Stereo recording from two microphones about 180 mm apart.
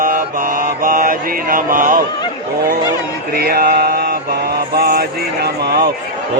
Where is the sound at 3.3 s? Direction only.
55° right (ahead or behind).